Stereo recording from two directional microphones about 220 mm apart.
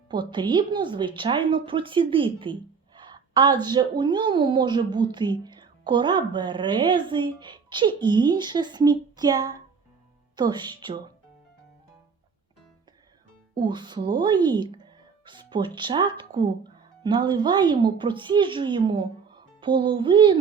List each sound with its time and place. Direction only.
0.1 s a woman's voice: 20° right (ahead or behind)
13.6 s a woman's voice: 20° right (ahead or behind)